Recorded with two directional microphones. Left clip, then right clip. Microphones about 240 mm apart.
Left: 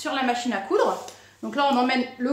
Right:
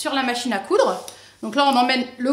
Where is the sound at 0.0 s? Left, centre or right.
Right.